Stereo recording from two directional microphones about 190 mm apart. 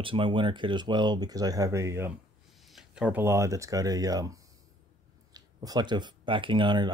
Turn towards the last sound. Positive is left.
turn(degrees=-25)  # may be behind; listen again after turning